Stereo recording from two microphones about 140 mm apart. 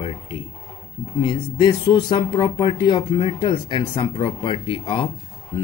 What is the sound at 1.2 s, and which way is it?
Speech, 35° left (ahead or behind).